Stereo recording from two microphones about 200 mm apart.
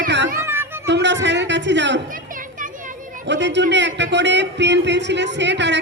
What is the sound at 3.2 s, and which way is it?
A man's voice, 60° right (ahead or behind).